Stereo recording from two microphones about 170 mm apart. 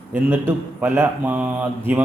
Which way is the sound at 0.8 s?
10° right (ahead or behind).